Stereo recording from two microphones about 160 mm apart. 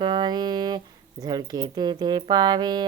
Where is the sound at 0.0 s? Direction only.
25° right (ahead or behind).